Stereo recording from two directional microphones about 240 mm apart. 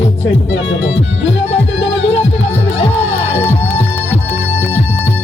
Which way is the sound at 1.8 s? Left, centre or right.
Left.